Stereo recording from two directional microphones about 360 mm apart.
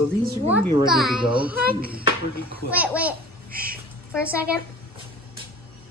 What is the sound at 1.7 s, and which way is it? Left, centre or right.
Speech, right.